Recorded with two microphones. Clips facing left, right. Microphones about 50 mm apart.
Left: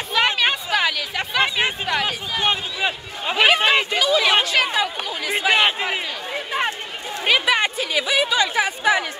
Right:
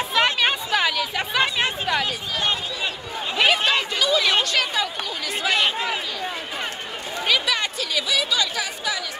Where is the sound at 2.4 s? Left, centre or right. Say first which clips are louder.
Left 4 dB; left.